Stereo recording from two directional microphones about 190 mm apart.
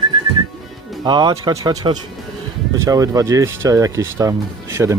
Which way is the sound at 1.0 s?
20° right (ahead or behind).